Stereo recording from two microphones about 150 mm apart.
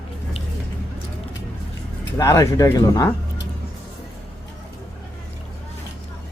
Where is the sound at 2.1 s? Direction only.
20° left (ahead or behind).